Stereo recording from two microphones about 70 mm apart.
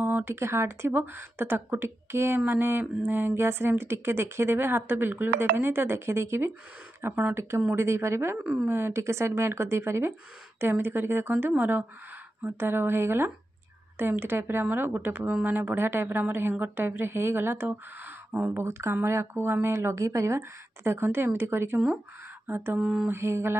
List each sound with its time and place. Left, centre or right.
0.0 s a woman's voice: right
22.8 s mantra: centre
23.0 s a woman's voice: right